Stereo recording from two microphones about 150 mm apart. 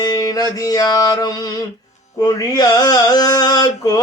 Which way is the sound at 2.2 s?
25° left (ahead or behind).